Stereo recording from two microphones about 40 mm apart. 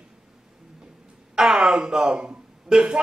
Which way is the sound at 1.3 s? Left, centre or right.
Centre.